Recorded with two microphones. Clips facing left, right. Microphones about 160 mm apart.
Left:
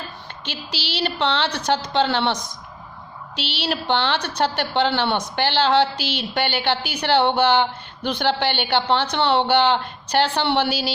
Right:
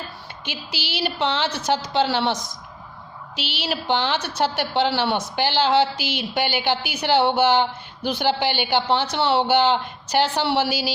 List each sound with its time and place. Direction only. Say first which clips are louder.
0.4 s a woman's voice: left 1 dB; 10° right (ahead or behind)